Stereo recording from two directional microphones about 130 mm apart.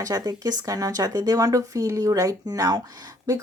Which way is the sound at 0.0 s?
30° right (ahead or behind).